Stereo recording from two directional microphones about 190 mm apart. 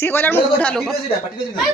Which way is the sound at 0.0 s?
10° left (ahead or behind).